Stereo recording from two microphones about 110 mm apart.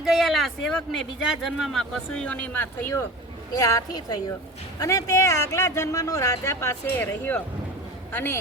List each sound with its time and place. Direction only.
0.0 s speech: centre (ahead or behind); by 2.9 s 15° left (ahead or behind)
3.5 s a woman's voice: 30° left (ahead or behind)